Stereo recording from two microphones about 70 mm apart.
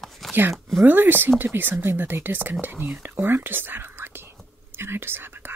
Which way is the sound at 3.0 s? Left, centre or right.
Right.